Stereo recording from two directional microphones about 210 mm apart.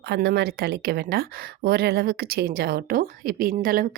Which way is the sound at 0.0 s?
55° right (ahead or behind).